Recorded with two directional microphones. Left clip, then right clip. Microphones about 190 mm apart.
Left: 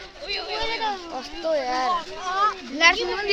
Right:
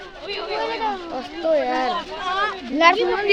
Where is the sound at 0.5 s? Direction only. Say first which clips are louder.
Right 3 dB; 20° left (ahead or behind).